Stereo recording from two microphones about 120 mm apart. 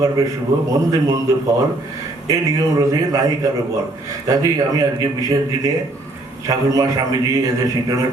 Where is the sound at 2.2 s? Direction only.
30° right (ahead or behind).